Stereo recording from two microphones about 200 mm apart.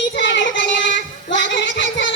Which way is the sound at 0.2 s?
65° left (ahead or behind).